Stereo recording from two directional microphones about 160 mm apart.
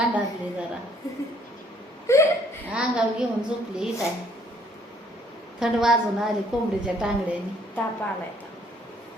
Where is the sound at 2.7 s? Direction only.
5° right (ahead or behind).